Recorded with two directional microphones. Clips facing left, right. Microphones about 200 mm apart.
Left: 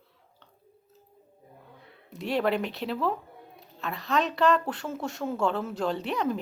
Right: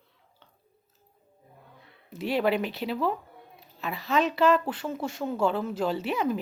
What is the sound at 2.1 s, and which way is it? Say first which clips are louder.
Speech: right 1 dB; centre (ahead or behind).